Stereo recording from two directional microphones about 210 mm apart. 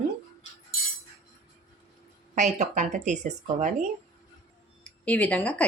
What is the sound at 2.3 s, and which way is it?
Speech, 35° right (ahead or behind).